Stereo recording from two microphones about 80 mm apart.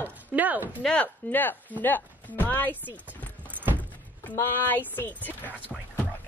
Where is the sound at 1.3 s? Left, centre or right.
Left.